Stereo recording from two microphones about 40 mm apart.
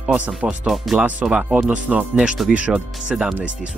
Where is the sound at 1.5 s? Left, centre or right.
Right.